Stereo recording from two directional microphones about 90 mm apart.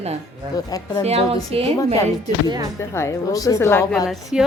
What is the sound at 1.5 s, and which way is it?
Speech, 90° right.